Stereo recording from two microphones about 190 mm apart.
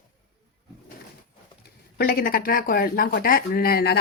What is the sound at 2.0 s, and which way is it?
Speech, 50° left (ahead or behind).